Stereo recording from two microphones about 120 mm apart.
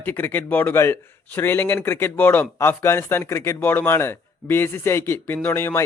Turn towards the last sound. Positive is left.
turn(degrees=20)  # may be behind; listen again after turning